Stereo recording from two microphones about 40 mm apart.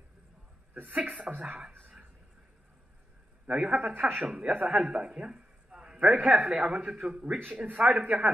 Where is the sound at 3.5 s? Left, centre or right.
Right.